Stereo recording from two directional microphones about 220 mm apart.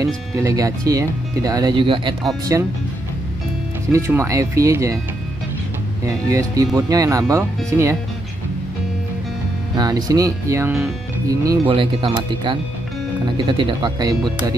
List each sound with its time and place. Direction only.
0.0 s speech: 15° right (ahead or behind)
3.9 s speech: 15° right (ahead or behind)
6.0 s speech: 15° right (ahead or behind)
9.8 s speech: 20° right (ahead or behind)